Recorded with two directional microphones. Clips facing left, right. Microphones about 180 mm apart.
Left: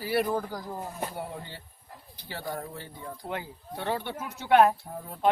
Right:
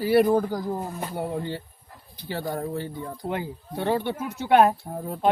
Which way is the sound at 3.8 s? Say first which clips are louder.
Right 7 dB; 30° right (ahead or behind).